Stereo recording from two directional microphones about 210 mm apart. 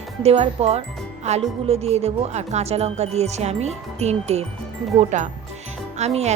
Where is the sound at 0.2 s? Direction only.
30° right (ahead or behind).